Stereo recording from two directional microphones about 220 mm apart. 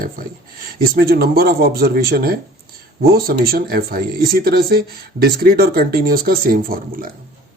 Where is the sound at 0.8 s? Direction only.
45° right (ahead or behind).